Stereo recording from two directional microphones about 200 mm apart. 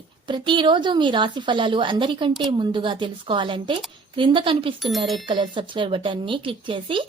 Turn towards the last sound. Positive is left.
turn(degrees=-25)  # may be behind; listen again after turning